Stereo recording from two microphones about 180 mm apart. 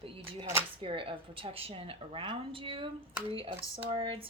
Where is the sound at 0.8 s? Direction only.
30° right (ahead or behind).